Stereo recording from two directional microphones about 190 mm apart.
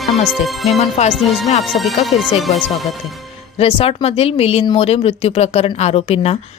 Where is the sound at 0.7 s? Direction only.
35° left (ahead or behind).